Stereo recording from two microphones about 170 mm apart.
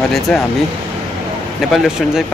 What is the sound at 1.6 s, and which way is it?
Speech, centre (ahead or behind).